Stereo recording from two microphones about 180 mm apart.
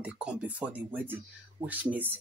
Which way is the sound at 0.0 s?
5° right (ahead or behind).